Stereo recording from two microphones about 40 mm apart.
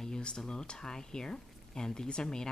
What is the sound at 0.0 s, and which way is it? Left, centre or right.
Speech, left.